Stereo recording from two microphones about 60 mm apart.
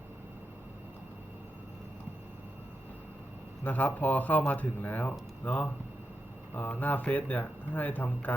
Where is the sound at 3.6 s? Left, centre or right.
Left.